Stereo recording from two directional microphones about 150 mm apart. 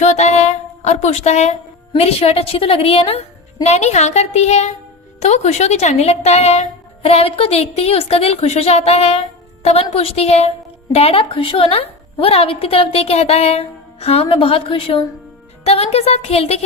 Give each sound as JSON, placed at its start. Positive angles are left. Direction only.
{"t": 0.0, "sound": "music", "side_deg": 50}
{"t": 2.0, "sound": "a woman's voice", "side_deg": 40}